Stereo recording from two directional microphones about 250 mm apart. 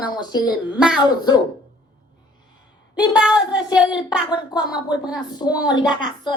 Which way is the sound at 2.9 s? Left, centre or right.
Centre.